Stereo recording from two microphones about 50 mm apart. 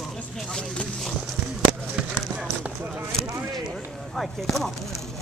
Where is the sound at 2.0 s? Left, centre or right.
Centre.